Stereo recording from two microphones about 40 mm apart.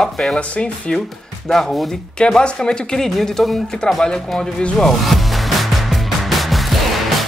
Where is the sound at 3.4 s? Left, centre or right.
Centre.